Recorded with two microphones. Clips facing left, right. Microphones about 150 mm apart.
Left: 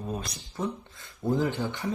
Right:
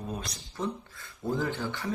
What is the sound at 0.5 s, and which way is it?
Speech, 20° left (ahead or behind).